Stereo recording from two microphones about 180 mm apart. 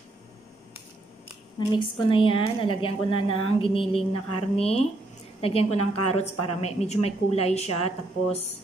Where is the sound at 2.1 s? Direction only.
30° left (ahead or behind).